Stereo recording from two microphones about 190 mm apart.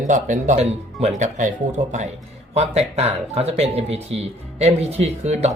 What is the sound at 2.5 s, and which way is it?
Speech, 35° right (ahead or behind).